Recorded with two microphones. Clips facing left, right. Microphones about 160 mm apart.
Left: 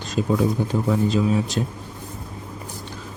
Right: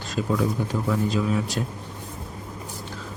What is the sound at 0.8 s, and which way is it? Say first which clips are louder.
Speech: left 4 dB; 25° left (ahead or behind).